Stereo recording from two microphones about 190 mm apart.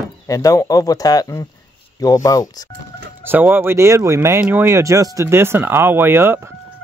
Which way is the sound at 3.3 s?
10° right (ahead or behind).